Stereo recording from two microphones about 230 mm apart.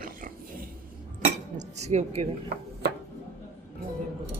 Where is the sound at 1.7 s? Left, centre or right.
Right.